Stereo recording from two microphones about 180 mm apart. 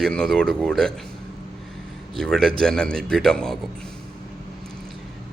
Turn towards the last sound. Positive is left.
turn(degrees=5)  # may be behind; listen again after turning